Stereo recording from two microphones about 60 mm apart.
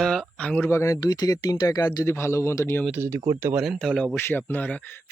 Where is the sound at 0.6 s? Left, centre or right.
Left.